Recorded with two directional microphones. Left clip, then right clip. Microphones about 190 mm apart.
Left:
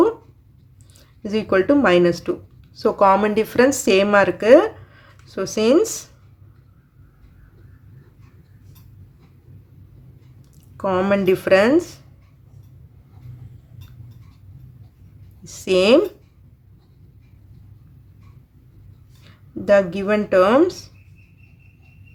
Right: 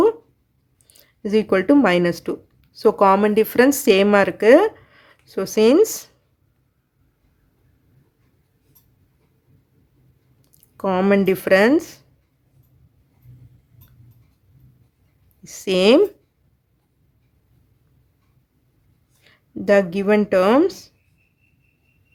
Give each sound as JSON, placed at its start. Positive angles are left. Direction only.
{"t": 0.9, "sound": "speech", "side_deg": -25}
{"t": 10.8, "sound": "speech", "side_deg": -25}
{"t": 15.4, "sound": "a woman's voice", "side_deg": -25}
{"t": 19.2, "sound": "speech", "side_deg": -25}